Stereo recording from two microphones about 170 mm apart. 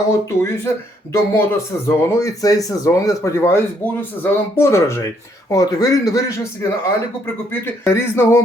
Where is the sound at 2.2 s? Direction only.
20° left (ahead or behind).